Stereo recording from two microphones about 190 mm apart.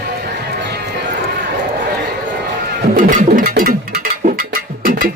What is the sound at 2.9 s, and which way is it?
Music, 45° right (ahead or behind).